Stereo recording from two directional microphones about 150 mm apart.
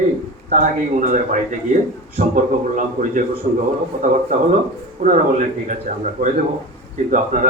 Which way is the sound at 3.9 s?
60° right (ahead or behind).